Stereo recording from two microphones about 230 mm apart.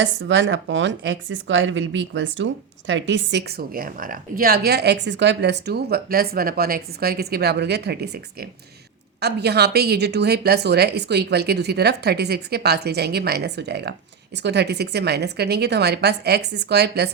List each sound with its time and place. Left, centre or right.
0.0 s speech: right